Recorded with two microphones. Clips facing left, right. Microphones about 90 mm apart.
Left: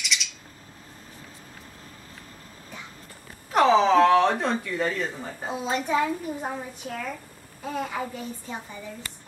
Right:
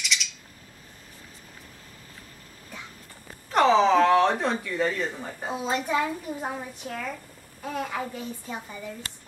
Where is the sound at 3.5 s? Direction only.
Centre (ahead or behind).